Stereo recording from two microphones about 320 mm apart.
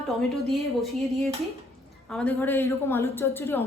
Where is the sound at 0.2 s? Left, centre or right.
Centre.